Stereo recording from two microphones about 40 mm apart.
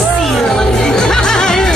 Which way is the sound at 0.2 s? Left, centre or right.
Centre.